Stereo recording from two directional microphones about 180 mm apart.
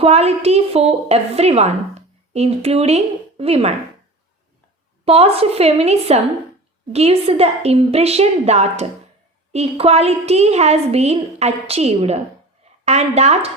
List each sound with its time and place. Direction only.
0.0 s a woman's voice: 35° right (ahead or behind)
5.0 s a woman's voice: 35° right (ahead or behind)